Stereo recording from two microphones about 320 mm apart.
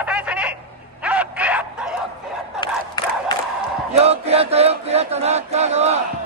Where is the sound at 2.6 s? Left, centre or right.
Centre.